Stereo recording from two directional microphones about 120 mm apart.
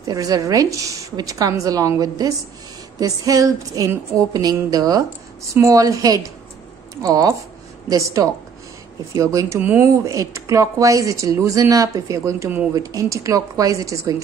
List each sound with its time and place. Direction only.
0.0 s speech: 30° right (ahead or behind)
3.0 s a sound: 30° right (ahead or behind)
5.5 s speech: 25° right (ahead or behind)
10.1 s speech: 25° right (ahead or behind)